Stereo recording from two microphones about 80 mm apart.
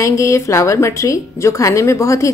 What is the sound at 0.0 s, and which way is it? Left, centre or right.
A woman's voice, left.